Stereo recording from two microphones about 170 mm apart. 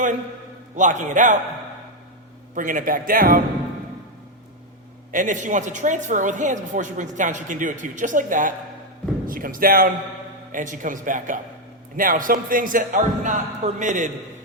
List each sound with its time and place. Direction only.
0.8 s a woman's voice: 45° right (ahead or behind)
2.6 s a woman's voice: 50° right (ahead or behind)
5.1 s a woman's voice: 50° right (ahead or behind)